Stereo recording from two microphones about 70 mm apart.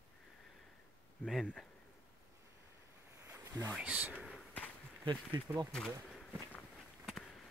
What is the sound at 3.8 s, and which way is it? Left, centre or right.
Speech, centre.